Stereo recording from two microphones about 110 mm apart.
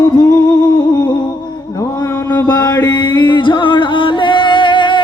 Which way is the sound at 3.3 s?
45° left (ahead or behind).